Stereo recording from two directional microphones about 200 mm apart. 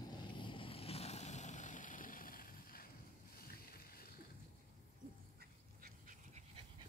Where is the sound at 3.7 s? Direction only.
50° left (ahead or behind).